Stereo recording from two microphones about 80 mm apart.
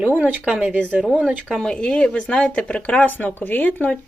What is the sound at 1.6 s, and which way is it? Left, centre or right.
Speech, centre.